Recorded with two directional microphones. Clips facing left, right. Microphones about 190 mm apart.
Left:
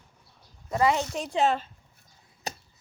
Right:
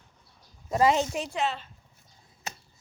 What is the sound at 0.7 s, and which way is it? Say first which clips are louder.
Speech: right 1 dB; 20° right (ahead or behind).